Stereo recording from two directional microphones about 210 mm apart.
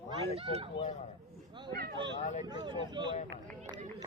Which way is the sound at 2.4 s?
20° right (ahead or behind).